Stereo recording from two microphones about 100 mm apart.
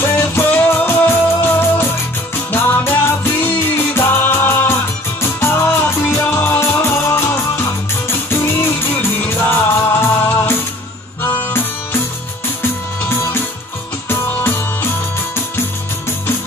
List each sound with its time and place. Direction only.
0.0 s music: 20° left (ahead or behind)
14.0 s music: 25° left (ahead or behind)